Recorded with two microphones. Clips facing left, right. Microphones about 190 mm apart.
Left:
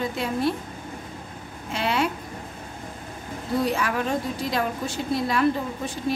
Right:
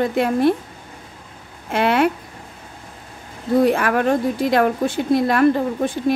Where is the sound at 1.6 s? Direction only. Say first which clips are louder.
Right 8 dB; 60° right (ahead or behind).